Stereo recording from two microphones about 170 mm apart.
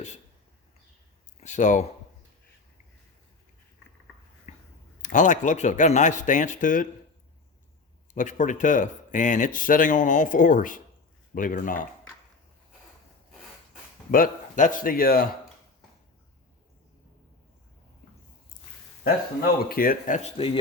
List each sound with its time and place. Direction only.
1.4 s speech: 45° left (ahead or behind)
4.5 s a sound: 45° left (ahead or behind)
5.0 s speech: 50° left (ahead or behind)
8.1 s speech: 50° left (ahead or behind)
14.1 s speech: 50° left (ahead or behind)
19.0 s speech: 60° left (ahead or behind)